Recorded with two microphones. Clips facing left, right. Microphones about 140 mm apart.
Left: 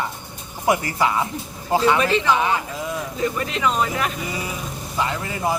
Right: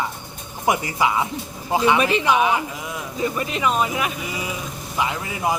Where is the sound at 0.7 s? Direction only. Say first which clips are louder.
Left 1 dB; 15° right (ahead or behind).